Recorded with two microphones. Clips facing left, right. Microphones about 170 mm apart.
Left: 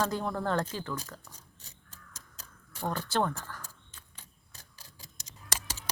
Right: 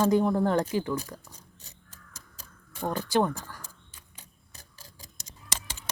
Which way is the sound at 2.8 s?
15° right (ahead or behind).